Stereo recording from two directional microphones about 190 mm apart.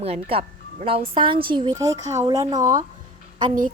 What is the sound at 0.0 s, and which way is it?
Speech, 30° right (ahead or behind).